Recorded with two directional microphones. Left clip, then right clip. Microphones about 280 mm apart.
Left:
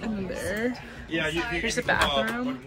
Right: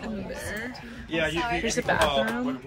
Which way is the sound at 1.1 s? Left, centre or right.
Right.